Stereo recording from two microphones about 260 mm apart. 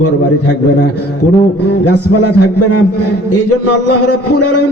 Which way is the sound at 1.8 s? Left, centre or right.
Left.